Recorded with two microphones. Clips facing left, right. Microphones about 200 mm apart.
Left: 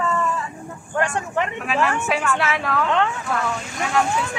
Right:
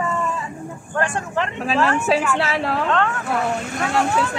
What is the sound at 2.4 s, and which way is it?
Speech, 30° right (ahead or behind).